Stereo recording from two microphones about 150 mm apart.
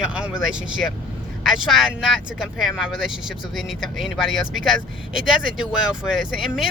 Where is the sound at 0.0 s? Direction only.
5° right (ahead or behind).